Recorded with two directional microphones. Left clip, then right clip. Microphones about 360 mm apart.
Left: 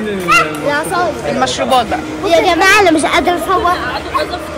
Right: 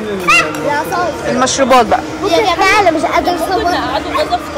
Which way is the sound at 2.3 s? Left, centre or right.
Left.